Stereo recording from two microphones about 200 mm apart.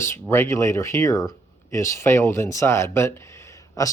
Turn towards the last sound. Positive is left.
turn(degrees=15)  # may be behind; listen again after turning